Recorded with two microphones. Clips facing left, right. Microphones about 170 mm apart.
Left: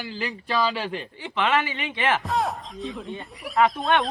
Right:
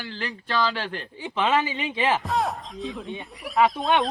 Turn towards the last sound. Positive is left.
turn(degrees=0)  # may be behind; listen again after turning